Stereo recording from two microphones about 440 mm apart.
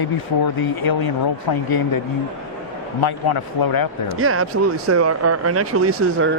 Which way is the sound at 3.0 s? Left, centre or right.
Left.